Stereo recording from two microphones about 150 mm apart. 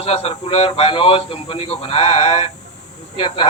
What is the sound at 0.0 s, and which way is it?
A man's voice, 45° left (ahead or behind).